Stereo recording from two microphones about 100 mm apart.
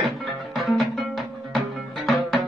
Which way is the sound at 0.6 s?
Centre (ahead or behind).